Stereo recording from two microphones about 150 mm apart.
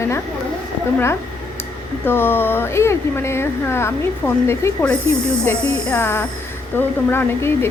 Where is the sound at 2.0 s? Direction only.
15° left (ahead or behind).